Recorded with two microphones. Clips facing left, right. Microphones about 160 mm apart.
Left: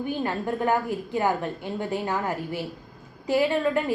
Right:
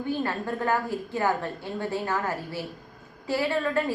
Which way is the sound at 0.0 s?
15° left (ahead or behind).